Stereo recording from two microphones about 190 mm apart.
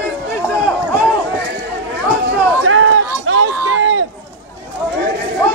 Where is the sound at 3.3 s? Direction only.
90° right.